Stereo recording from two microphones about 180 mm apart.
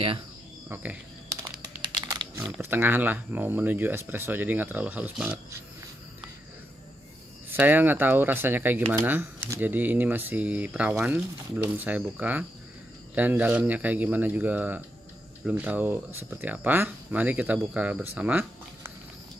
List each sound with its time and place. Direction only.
1.8 s crumpling: 25° right (ahead or behind)
2.6 s speech: 10° right (ahead or behind)
7.5 s speech: 10° right (ahead or behind)